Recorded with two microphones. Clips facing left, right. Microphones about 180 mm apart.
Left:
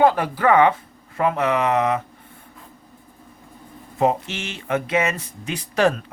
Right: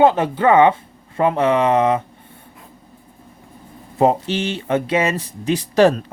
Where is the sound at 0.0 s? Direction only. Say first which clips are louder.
Right 3 dB; 25° right (ahead or behind).